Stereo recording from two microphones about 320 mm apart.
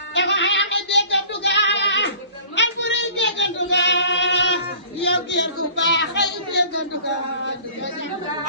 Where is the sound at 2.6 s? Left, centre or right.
Left.